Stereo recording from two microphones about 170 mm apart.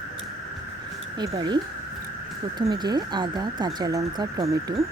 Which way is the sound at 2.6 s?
25° right (ahead or behind).